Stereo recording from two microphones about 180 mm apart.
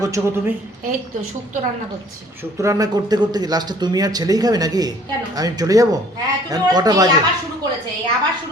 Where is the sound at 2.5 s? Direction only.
15° right (ahead or behind).